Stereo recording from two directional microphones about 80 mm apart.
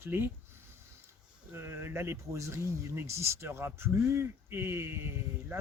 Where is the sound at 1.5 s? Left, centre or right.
Right.